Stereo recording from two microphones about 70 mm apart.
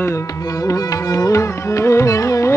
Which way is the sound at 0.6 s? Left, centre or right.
Left.